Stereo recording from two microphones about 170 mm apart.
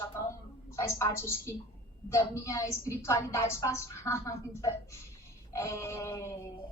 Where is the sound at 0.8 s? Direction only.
20° left (ahead or behind).